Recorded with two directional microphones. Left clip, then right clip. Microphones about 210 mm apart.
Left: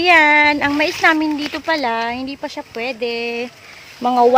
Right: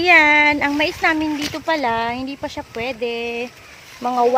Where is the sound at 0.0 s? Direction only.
5° left (ahead or behind).